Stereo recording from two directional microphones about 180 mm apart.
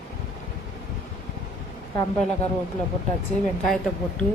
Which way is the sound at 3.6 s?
Centre (ahead or behind).